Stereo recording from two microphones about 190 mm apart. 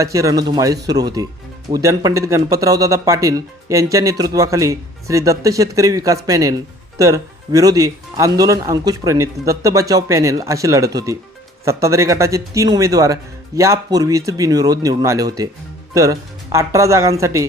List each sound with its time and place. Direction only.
0.0 s speech: 15° right (ahead or behind)